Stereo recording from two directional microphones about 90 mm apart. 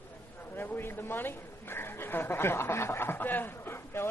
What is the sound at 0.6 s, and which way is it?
A woman's voice, 25° left (ahead or behind).